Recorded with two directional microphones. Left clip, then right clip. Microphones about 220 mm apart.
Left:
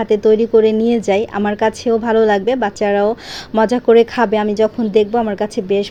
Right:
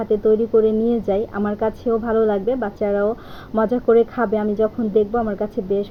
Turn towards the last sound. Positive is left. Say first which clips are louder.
# left 5 dB
turn(degrees=25)  # may be behind; listen again after turning